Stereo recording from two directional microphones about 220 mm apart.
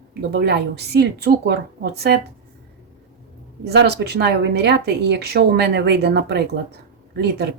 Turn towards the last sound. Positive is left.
turn(degrees=-45)  # may be behind; listen again after turning